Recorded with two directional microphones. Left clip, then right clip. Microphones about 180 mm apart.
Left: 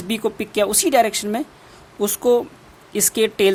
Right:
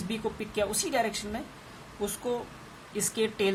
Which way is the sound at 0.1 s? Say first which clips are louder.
Left 12 dB; 70° left (ahead or behind).